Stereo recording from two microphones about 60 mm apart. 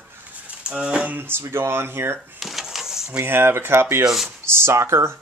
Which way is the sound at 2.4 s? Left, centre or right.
Centre.